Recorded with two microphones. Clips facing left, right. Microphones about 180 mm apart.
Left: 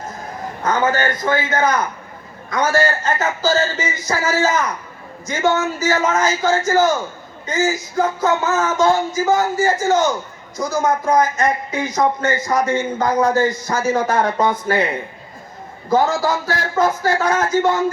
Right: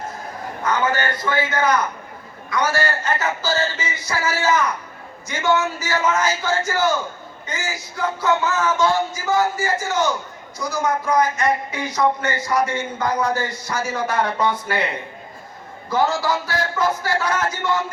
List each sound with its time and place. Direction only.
0.6 s speech: 45° left (ahead or behind)
2.5 s speech: 45° left (ahead or behind)
15.9 s speech: 45° left (ahead or behind)